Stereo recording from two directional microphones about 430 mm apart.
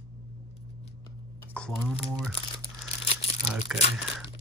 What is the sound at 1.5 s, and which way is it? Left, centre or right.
Speech, centre.